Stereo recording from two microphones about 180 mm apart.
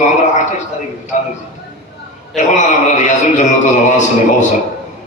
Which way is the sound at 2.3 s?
40° left (ahead or behind).